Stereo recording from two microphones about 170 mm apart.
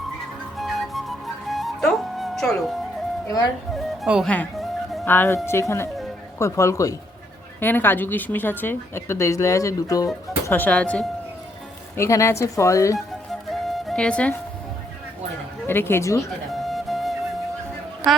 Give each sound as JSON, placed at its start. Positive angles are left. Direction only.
{"t": 0.5, "sound": "music", "side_deg": 0}
{"t": 3.2, "sound": "a woman's voice", "side_deg": 20}
{"t": 4.0, "sound": "a woman's voice", "side_deg": -5}
{"t": 13.5, "sound": "music", "side_deg": 0}
{"t": 15.6, "sound": "a woman's voice", "side_deg": 15}
{"t": 16.5, "sound": "music", "side_deg": 0}